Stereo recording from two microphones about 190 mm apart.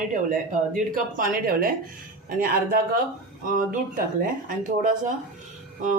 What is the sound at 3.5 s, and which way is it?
Speech, 45° right (ahead or behind).